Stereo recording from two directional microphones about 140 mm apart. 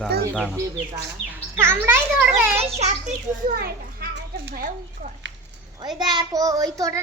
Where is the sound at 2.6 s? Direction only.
45° right (ahead or behind).